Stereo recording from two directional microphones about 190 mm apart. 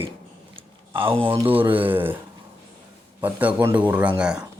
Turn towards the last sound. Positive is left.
turn(degrees=-5)  # may be behind; listen again after turning